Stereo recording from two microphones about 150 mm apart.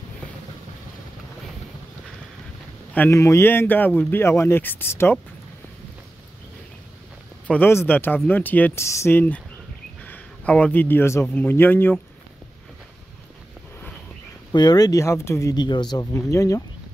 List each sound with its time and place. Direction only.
2.9 s speech: 15° left (ahead or behind)
7.4 s speech: 10° left (ahead or behind)
14.5 s speech: 25° left (ahead or behind)